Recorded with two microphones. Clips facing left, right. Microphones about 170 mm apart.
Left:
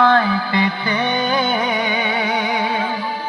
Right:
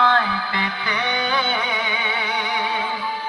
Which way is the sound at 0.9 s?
45° left (ahead or behind).